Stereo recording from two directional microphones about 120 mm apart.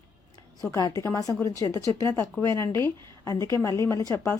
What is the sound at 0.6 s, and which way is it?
A woman's voice, 25° left (ahead or behind).